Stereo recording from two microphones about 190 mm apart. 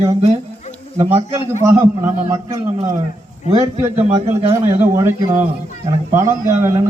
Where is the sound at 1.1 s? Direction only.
15° right (ahead or behind).